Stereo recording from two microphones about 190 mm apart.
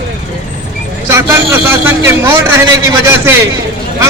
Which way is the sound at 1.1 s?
10° right (ahead or behind).